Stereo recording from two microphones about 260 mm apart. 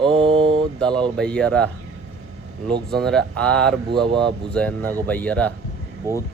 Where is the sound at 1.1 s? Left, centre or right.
Centre.